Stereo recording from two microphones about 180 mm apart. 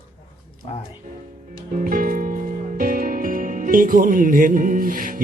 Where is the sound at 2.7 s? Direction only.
50° right (ahead or behind).